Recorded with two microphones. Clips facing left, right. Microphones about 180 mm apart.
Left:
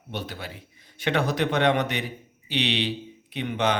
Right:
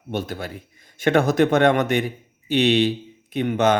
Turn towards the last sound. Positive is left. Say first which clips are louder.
# right 6 dB
turn(degrees=-45)  # may be behind; listen again after turning